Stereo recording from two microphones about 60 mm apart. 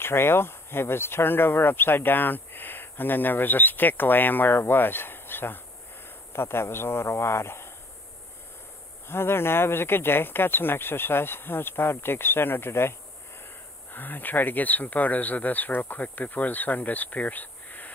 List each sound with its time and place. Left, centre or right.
0.0 s a man's voice: left
9.0 s speech: left
13.9 s speech: left